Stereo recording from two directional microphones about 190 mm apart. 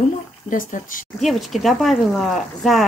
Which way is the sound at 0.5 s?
45° left (ahead or behind).